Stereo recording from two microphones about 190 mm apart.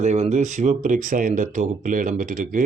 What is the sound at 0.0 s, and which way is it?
Speech, 35° right (ahead or behind).